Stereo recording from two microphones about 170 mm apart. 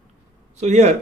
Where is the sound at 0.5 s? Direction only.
40° right (ahead or behind).